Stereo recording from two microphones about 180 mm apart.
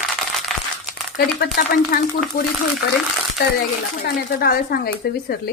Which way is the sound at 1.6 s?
55° left (ahead or behind).